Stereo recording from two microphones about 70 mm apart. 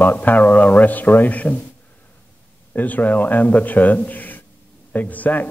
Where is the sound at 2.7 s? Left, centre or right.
Left.